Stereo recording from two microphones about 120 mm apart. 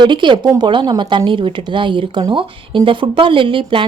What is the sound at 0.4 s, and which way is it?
Speech, 30° right (ahead or behind).